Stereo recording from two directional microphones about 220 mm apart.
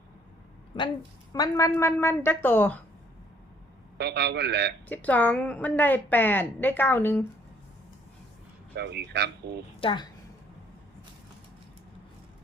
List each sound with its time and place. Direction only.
1.3 s a woman's voice: 15° left (ahead or behind)
3.9 s speech: 50° right (ahead or behind)
4.9 s a woman's voice: 5° left (ahead or behind)
8.7 s speech: 50° right (ahead or behind)
9.8 s a woman's voice: 20° left (ahead or behind)